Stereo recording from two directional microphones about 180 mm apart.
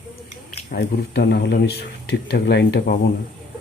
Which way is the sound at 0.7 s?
65° left (ahead or behind).